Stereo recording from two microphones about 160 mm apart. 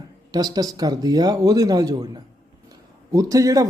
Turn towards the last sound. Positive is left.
turn(degrees=-20)  # may be behind; listen again after turning